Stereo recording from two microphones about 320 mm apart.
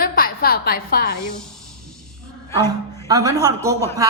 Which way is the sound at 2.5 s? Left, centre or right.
Centre.